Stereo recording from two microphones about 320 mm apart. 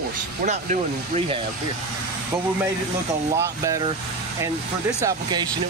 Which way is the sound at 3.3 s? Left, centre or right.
Centre.